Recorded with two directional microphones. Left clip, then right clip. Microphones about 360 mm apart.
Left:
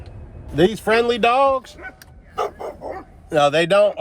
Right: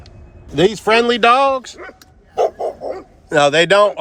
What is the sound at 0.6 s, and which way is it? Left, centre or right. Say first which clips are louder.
Speech: right 3 dB; right.